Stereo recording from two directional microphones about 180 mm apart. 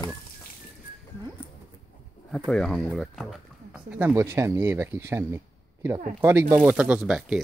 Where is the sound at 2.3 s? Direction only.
Centre (ahead or behind).